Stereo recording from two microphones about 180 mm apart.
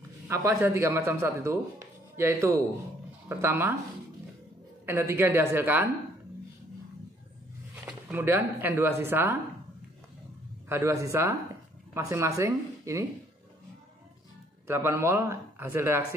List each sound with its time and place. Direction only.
0.3 s speech: 15° right (ahead or behind)
4.8 s speech: 15° right (ahead or behind)
7.7 s speech: 10° right (ahead or behind)
10.7 s speech: 15° right (ahead or behind)
14.7 s speech: 15° right (ahead or behind)